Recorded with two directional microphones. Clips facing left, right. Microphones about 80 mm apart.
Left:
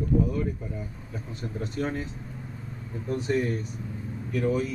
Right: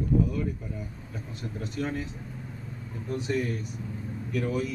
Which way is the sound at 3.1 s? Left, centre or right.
Left.